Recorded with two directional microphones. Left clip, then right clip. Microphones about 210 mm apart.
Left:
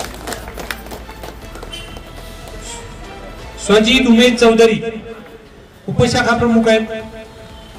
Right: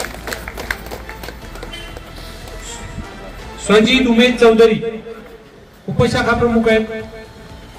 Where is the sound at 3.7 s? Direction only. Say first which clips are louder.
Left 1 dB; 60° left (ahead or behind).